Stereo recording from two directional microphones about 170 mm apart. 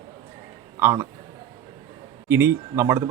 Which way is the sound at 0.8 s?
15° right (ahead or behind).